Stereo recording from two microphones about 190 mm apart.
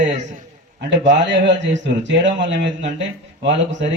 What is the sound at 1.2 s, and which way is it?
A man's voice, 70° right (ahead or behind).